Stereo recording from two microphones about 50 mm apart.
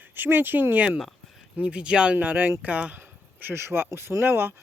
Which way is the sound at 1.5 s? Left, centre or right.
Right.